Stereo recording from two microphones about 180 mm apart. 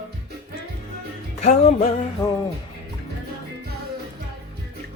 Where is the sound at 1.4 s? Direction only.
40° left (ahead or behind).